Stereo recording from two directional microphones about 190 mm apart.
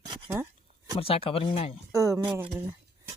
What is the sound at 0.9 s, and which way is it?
Speech, 30° left (ahead or behind).